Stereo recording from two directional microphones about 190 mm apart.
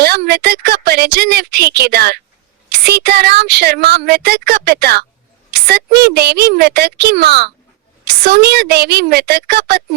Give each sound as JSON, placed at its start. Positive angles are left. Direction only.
{"t": 0.0, "sound": "a woman's voice", "side_deg": -55}